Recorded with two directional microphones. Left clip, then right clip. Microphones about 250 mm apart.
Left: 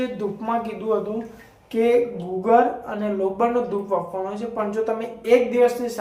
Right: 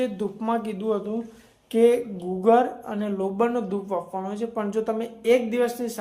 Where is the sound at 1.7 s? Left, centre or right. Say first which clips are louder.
Left 1 dB; right.